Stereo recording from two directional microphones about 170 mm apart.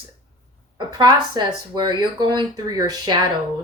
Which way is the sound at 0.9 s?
25° right (ahead or behind).